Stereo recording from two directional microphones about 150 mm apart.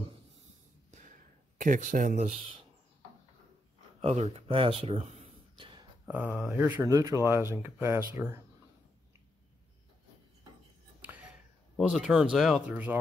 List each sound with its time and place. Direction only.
1.6 s speech: 60° right (ahead or behind); by 2.6 s 45° right (ahead or behind)
4.0 s speech: 45° right (ahead or behind)
5.6 s a sound: 35° right (ahead or behind)
6.0 s speech: 10° right (ahead or behind)
11.8 s speech: 5° right (ahead or behind)